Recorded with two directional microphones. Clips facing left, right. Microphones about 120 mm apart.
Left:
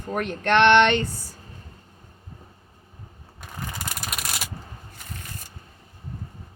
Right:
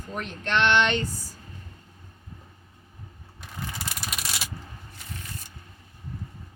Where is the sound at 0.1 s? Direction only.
60° left (ahead or behind).